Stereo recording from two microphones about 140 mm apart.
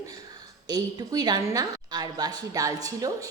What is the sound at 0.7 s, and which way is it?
A woman's voice, 30° right (ahead or behind).